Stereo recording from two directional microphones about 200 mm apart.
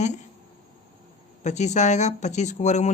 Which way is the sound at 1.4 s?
35° left (ahead or behind).